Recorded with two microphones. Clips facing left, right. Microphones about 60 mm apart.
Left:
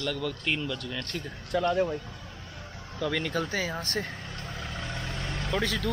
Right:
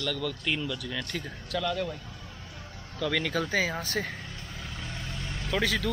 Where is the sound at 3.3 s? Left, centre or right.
Centre.